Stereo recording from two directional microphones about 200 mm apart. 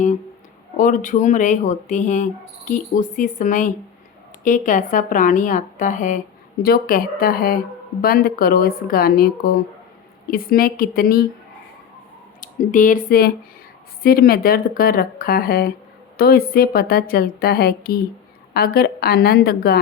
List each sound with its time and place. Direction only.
0.8 s speech: 40° left (ahead or behind)
6.6 s a woman's voice: 50° left (ahead or behind)
12.4 s a woman's voice: 40° left (ahead or behind)